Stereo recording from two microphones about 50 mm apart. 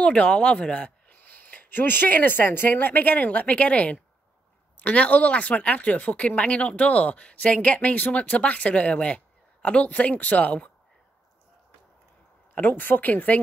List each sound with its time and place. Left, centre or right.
0.0 s speech: left
12.5 s speech: left